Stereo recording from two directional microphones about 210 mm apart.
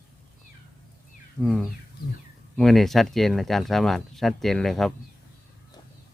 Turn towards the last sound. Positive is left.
turn(degrees=0)  # may be behind; listen again after turning